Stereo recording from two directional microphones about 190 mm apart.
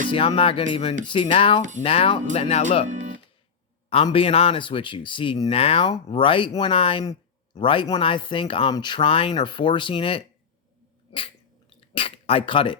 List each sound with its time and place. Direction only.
0.1 s speech: 25° left (ahead or behind)
2.9 s music: 40° right (ahead or behind)
3.8 s speech: 30° left (ahead or behind)
11.9 s speech: 30° left (ahead or behind)